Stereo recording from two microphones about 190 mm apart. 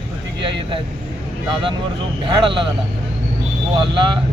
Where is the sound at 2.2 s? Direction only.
25° right (ahead or behind).